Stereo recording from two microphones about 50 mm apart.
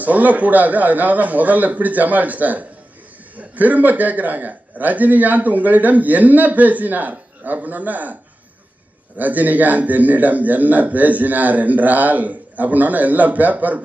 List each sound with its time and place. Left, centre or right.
0.0 s a man's voice: right